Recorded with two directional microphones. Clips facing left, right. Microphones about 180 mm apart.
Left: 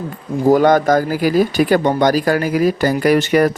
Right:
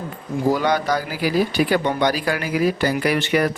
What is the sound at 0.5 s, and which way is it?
Speech, 50° left (ahead or behind).